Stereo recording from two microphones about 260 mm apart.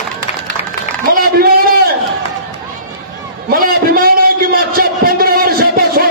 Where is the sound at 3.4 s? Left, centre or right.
Right.